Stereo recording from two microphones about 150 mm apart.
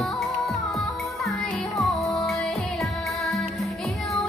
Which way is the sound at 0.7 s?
Centre (ahead or behind).